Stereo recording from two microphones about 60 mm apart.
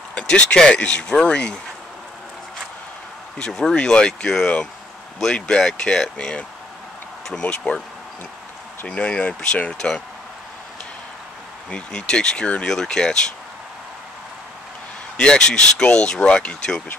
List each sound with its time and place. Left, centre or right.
0.1 s speech: centre
3.3 s speech: centre
7.4 s speech: centre
8.8 s speech: centre
11.7 s speech: centre
15.1 s speech: centre